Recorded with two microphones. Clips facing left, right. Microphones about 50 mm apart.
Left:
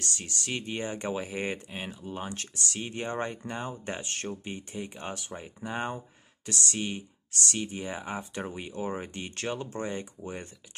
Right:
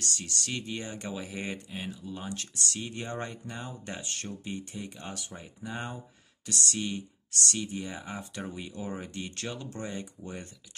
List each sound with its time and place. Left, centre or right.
0.0 s speech: left